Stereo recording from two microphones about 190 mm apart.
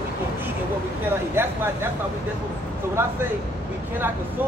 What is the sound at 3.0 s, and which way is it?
Speech, 10° right (ahead or behind).